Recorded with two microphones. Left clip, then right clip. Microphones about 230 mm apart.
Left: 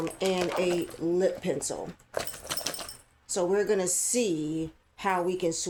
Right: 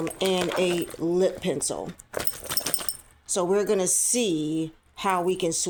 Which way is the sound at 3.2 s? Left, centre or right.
Right.